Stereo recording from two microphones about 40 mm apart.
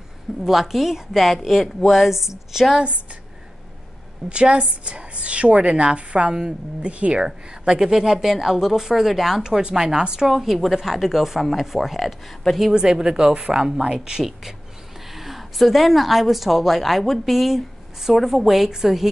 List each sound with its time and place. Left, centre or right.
0.4 s speech: centre
2.8 s a woman's voice: right
4.3 s a woman's voice: right
7.2 s a woman's voice: right
9.4 s a woman's voice: centre
10.2 s speech: centre
12.7 s a woman's voice: centre
15.0 s speech: centre